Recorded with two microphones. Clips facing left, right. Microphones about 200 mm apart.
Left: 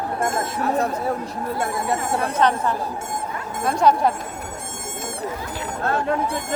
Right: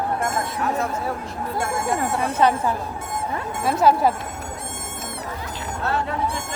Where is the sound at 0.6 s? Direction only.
35° left (ahead or behind).